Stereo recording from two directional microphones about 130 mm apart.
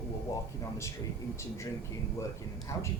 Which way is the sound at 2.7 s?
20° left (ahead or behind).